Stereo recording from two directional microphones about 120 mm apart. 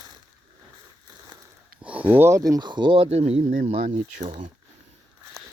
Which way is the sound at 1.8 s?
10° right (ahead or behind).